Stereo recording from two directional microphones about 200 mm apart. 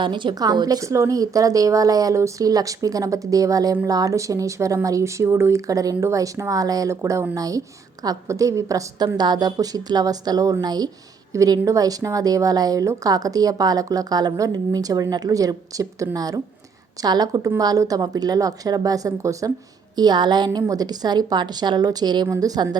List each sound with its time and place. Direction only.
0.0 s a woman's voice: 25° right (ahead or behind)